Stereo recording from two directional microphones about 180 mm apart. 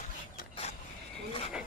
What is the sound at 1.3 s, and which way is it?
Insect, 30° left (ahead or behind).